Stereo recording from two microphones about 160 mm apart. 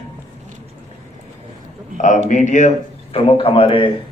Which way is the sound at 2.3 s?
50° left (ahead or behind).